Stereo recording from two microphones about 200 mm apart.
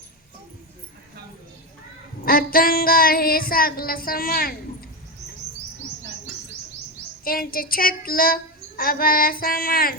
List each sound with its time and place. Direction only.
2.2 s speech: 45° left (ahead or behind)
7.3 s speech: 45° left (ahead or behind)